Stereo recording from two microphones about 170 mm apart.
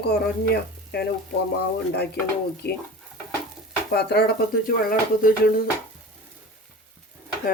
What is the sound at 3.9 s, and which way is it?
Speech, 75° left (ahead or behind).